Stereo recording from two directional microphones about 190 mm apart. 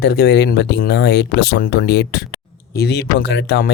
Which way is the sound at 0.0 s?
60° left (ahead or behind).